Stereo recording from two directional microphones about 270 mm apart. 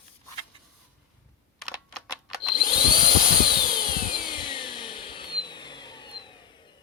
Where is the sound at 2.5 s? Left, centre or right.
Centre.